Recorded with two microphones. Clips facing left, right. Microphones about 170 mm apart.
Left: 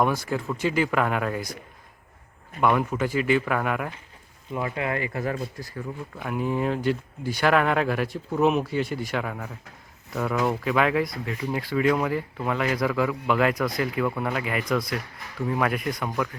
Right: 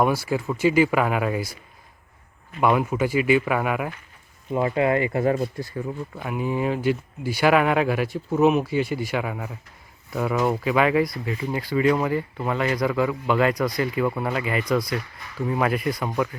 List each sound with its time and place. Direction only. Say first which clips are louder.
0.0 s speech: right 2 dB; 5° right (ahead or behind)
2.6 s speech: right 2 dB; 10° right (ahead or behind)
4.5 s speech: right 7 dB; 25° right (ahead or behind)
6.1 s speech: even; centre (ahead or behind)